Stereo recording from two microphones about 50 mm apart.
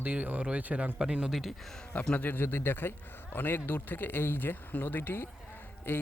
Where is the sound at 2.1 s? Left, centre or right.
Left.